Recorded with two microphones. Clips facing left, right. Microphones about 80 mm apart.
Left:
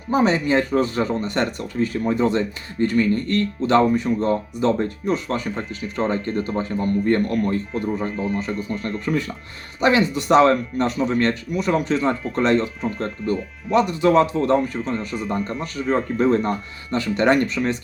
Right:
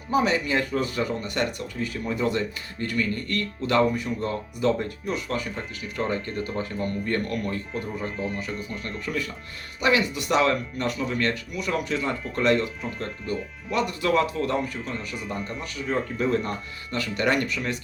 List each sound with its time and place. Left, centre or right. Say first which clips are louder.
0.1 s speech: left 5 dB; left
8.1 s speech: left 5 dB; centre
8.4 s speech: left 7 dB; left